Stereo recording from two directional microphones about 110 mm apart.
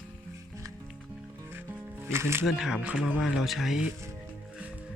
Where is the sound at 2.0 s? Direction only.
25° right (ahead or behind).